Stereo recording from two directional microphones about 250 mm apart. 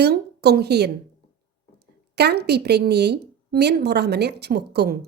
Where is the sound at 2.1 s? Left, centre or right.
Right.